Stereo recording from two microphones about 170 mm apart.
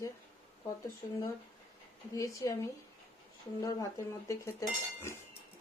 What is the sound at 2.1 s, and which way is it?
Speech, 20° left (ahead or behind).